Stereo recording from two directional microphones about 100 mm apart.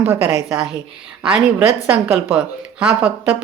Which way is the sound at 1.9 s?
20° right (ahead or behind).